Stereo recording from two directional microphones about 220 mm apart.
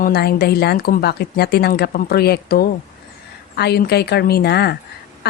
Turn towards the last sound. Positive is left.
turn(degrees=45)  # may be behind; listen again after turning